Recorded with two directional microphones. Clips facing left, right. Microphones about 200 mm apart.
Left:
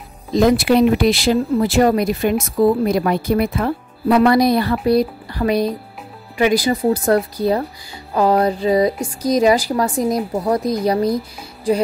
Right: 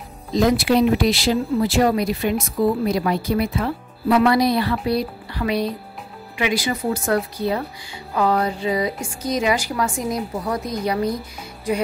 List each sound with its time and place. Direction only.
0.3 s speech: 55° left (ahead or behind); by 11.8 s 30° left (ahead or behind)